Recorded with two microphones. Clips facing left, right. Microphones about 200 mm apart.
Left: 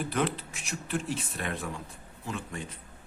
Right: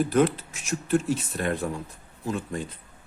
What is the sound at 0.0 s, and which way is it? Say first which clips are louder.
Speech: right 8 dB; 40° right (ahead or behind).